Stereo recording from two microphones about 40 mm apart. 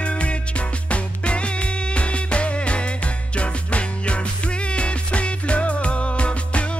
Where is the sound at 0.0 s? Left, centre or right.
Left.